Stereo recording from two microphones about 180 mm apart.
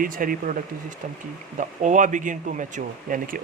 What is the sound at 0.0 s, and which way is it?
Speech, 50° right (ahead or behind).